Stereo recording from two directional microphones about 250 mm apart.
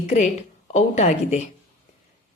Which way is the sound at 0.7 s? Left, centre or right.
Left.